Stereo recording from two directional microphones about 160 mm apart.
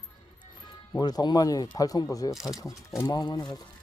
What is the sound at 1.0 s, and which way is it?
Speech, 25° left (ahead or behind).